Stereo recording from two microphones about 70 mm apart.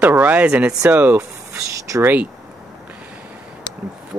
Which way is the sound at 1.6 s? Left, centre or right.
Right.